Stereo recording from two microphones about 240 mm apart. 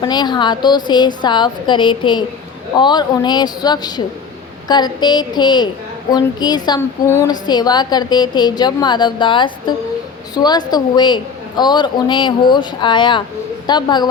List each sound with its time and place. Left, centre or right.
0.0 s a woman's voice: centre